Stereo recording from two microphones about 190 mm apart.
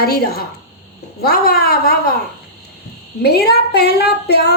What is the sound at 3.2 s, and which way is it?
Speech, 55° left (ahead or behind).